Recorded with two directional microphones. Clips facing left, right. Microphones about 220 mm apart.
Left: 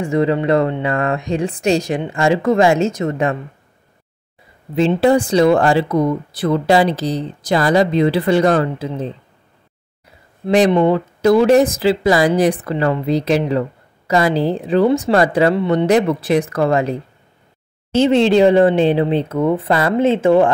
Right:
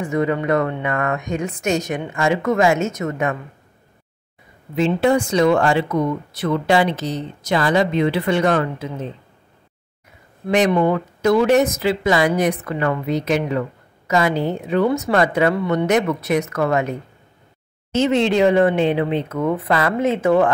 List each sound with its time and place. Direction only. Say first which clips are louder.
0.0 s speech: left 4 dB; 30° left (ahead or behind)
4.7 s speech: left 3 dB; 35° left (ahead or behind)
10.4 s speech: left 4 dB; 30° left (ahead or behind)